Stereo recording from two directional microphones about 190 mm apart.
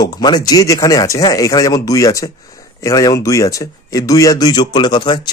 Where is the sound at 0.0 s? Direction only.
20° left (ahead or behind).